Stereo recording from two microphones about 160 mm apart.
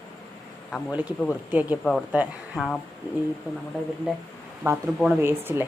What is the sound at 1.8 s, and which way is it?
Speech, 5° left (ahead or behind).